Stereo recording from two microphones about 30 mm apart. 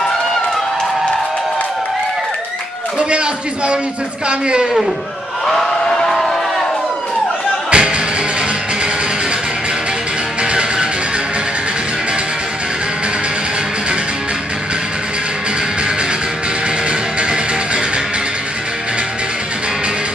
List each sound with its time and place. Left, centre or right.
3.0 s a man's voice: right
6.0 s a sound: centre
7.7 s music: right
10.4 s music: right
17.2 s music: right